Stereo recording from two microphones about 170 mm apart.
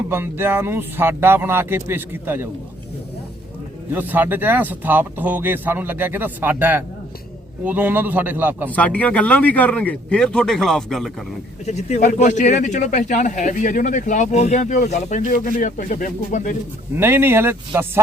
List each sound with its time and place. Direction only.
0.1 s speech: 15° right (ahead or behind)
3.9 s speech: 10° right (ahead or behind)
8.7 s a man's voice: 10° left (ahead or behind)
11.6 s speech: 40° left (ahead or behind)
16.9 s speech: 15° right (ahead or behind)